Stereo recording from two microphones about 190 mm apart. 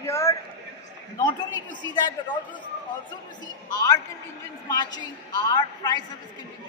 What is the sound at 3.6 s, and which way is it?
A woman's voice, 20° left (ahead or behind).